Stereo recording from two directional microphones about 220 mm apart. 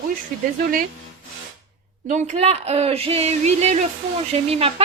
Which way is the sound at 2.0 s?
30° right (ahead or behind).